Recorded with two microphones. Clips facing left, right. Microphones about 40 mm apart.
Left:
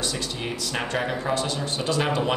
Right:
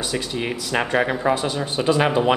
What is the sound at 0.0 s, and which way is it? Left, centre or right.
Speech, centre.